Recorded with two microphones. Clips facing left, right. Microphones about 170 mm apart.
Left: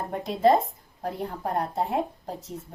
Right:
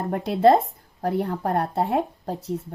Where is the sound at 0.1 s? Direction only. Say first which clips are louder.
Right 4 dB; 65° right (ahead or behind).